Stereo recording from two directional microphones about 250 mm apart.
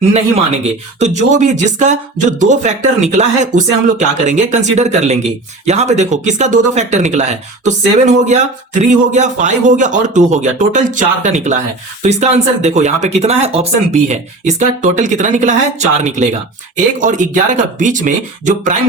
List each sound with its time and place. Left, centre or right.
0.1 s speech: right